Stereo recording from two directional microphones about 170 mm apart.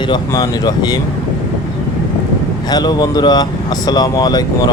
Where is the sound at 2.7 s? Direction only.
25° left (ahead or behind).